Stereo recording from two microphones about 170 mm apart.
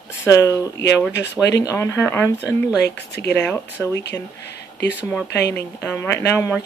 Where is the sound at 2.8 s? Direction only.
75° left (ahead or behind).